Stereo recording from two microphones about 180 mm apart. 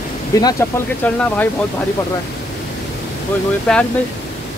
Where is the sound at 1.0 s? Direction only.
10° left (ahead or behind).